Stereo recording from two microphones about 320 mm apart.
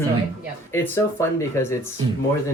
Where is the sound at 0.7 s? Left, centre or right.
Centre.